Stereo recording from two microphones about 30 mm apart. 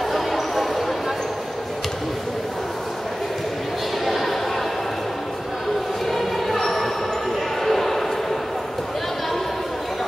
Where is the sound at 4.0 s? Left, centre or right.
Centre.